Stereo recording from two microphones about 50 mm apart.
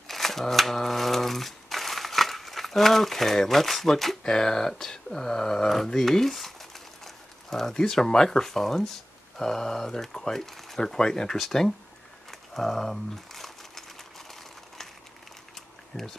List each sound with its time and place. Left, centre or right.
0.1 s speech: centre
12.3 s crumpling: centre
15.9 s speech: left